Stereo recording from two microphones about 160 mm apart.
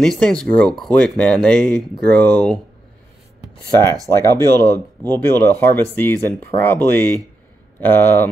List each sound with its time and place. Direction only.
0.0 s speech: 5° left (ahead or behind)
4.2 s speech: 15° left (ahead or behind)